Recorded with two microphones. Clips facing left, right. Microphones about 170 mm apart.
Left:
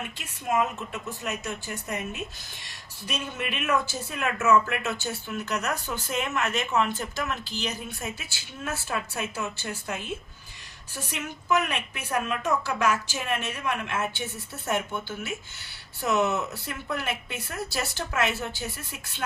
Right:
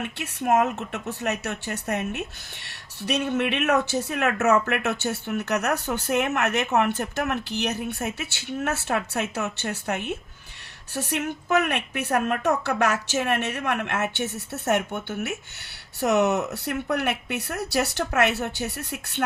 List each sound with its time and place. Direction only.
0.0 s a woman's voice: 70° right (ahead or behind)